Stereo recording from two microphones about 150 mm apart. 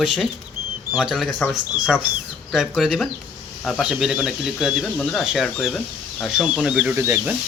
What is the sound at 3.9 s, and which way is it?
Speech, 5° right (ahead or behind).